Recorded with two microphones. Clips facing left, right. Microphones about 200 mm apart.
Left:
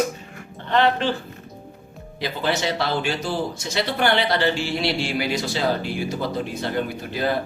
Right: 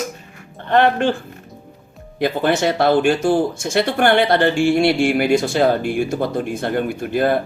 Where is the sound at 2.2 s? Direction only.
50° right (ahead or behind).